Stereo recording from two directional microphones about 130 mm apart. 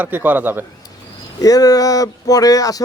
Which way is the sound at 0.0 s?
15° right (ahead or behind).